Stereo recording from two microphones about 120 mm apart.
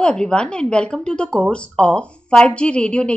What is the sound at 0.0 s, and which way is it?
A woman's voice, 10° left (ahead or behind).